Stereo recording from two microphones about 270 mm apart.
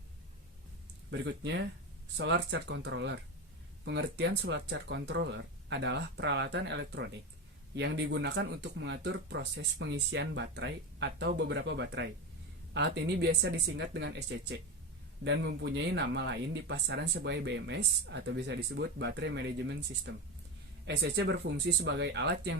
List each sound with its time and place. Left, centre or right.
1.1 s speech: right